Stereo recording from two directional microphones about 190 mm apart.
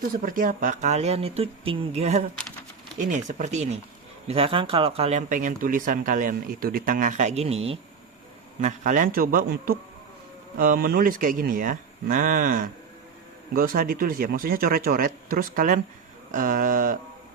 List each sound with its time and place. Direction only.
0.1 s speech: 50° right (ahead or behind); by 7.8 s 30° right (ahead or behind)
8.6 s speech: 40° right (ahead or behind)